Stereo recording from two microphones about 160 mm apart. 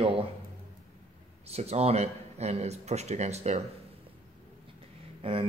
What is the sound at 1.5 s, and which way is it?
Speech, 40° right (ahead or behind).